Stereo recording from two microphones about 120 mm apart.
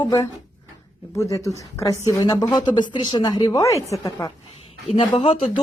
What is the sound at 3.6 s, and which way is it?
Speech, 25° left (ahead or behind).